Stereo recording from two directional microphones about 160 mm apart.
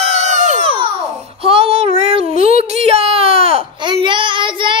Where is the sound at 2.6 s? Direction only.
40° right (ahead or behind).